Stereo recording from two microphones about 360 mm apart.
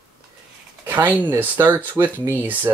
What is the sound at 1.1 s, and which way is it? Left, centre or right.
Speech, centre.